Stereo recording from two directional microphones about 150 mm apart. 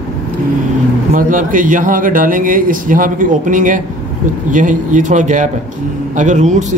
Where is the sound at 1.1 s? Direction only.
60° right (ahead or behind).